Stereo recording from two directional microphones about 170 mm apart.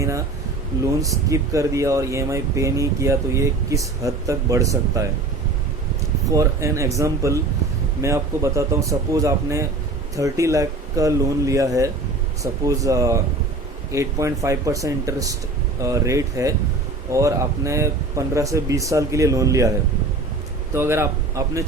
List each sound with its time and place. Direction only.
1.0 s speech: 20° right (ahead or behind)
6.3 s a man's voice: 15° right (ahead or behind)
20.7 s a man's voice: 15° right (ahead or behind)